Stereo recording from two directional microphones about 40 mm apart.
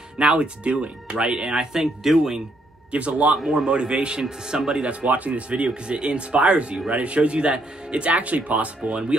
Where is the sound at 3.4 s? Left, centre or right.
Centre.